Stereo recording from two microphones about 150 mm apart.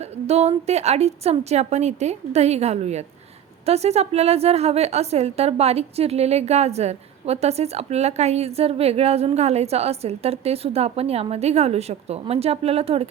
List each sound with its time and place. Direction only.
0.0 s a woman's voice: 45° right (ahead or behind)